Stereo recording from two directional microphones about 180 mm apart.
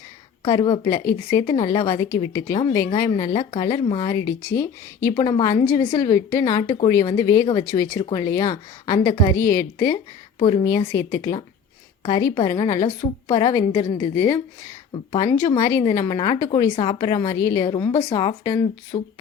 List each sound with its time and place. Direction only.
0.4 s a woman's voice: 25° left (ahead or behind)
10.3 s a woman's voice: 30° left (ahead or behind)